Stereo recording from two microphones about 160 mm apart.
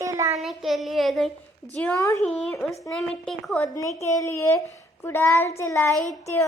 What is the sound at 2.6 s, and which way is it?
Speech, 5° left (ahead or behind).